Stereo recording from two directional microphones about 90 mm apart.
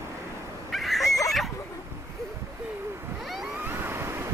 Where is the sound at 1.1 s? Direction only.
40° left (ahead or behind).